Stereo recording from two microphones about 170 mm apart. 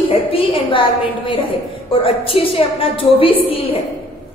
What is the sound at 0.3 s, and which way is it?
A woman's voice, 30° left (ahead or behind).